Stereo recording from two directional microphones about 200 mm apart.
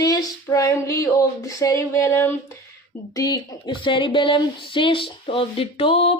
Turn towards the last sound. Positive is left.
turn(degrees=30)  # may be behind; listen again after turning